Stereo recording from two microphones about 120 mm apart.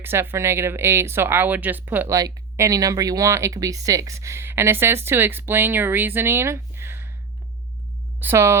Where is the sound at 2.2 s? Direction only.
30° right (ahead or behind).